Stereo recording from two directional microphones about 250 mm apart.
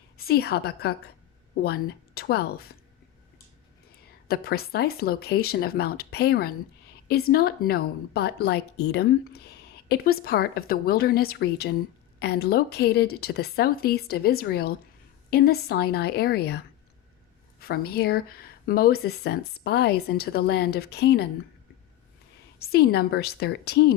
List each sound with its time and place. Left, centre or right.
0.2 s a woman's voice: left
4.3 s a woman's voice: left
17.6 s a woman's voice: left
22.5 s a woman's voice: left